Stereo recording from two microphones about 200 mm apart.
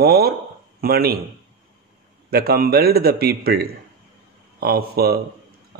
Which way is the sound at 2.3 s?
50° right (ahead or behind).